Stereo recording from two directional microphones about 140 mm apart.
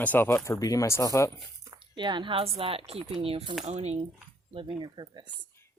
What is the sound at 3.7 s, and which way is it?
Speech, 50° right (ahead or behind).